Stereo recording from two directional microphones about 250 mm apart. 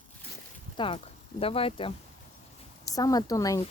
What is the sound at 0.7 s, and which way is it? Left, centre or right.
Speech, centre.